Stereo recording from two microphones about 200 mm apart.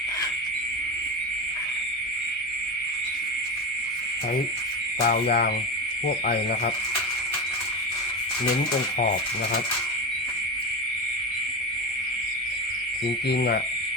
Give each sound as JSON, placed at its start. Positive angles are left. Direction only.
{"t": 5.0, "sound": "speech", "side_deg": 50}
{"t": 13.3, "sound": "speech", "side_deg": 55}